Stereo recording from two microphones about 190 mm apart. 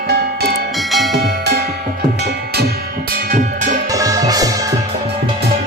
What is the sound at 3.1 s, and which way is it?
Music, 45° right (ahead or behind).